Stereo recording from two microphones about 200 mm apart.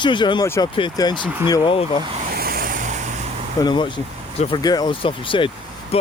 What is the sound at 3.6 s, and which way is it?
Speech, 25° left (ahead or behind).